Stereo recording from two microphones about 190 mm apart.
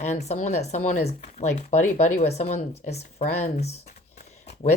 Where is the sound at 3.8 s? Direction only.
40° left (ahead or behind).